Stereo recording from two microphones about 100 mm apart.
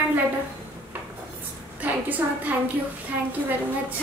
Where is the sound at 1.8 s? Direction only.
15° right (ahead or behind).